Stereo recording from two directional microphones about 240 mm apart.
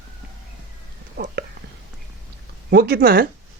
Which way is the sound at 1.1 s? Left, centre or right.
Right.